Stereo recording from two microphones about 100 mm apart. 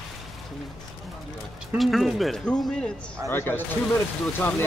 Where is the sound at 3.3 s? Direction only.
20° left (ahead or behind).